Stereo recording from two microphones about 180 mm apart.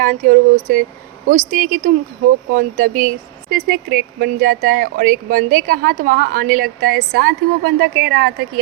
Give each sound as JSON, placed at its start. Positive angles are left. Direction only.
{"t": 0.0, "sound": "a woman's voice", "side_deg": -50}